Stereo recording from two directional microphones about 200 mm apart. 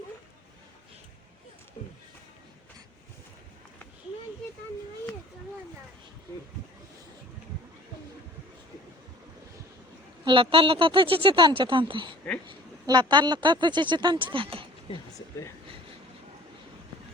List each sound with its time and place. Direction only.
10.2 s speech: 25° right (ahead or behind)